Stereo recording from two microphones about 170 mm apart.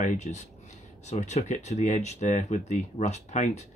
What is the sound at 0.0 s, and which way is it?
Speech, 45° left (ahead or behind).